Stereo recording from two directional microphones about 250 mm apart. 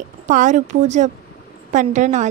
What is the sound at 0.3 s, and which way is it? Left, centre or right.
A woman's voice, right.